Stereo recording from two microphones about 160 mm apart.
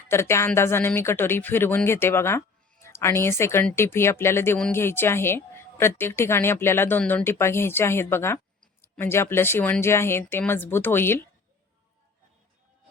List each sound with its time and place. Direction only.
0.1 s a woman's voice: 15° left (ahead or behind)